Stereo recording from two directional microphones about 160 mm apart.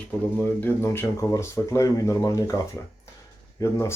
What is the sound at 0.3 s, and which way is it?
Speech, 15° left (ahead or behind).